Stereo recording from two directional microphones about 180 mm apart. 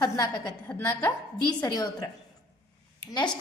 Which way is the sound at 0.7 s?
10° left (ahead or behind).